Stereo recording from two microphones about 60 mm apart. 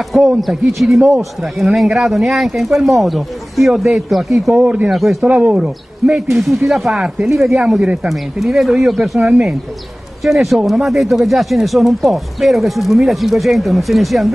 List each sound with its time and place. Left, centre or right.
0.1 s speech: centre
4.6 s speech: centre
4.8 s speech: centre
5.3 s speech: right
5.6 s speech: centre